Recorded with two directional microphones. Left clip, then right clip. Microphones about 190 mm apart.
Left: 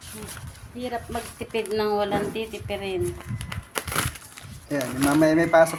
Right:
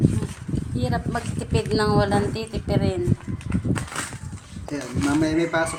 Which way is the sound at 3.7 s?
25° left (ahead or behind).